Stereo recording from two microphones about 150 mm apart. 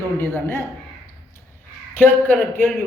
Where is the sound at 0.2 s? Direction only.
15° left (ahead or behind).